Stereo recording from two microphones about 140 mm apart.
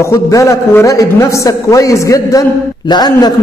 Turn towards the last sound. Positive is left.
turn(degrees=30)  # may be behind; listen again after turning